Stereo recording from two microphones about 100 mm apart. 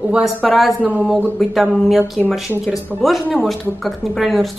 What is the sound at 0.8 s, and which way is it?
Speech, 15° right (ahead or behind).